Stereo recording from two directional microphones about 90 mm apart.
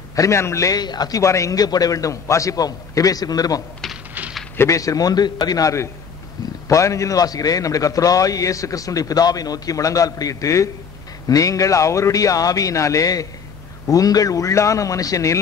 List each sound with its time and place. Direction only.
0.1 s a man's voice: 35° left (ahead or behind)
1.2 s a man's voice: 35° left (ahead or behind)